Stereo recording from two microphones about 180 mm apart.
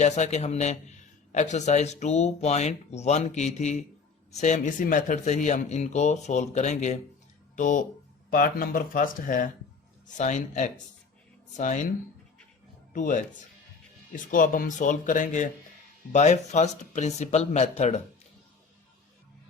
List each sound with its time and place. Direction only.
0.0 s a man's voice: 40° left (ahead or behind)
12.9 s speech: 45° left (ahead or behind)
14.3 s a man's voice: 50° left (ahead or behind)